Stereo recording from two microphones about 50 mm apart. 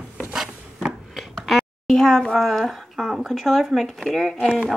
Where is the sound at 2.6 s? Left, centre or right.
Centre.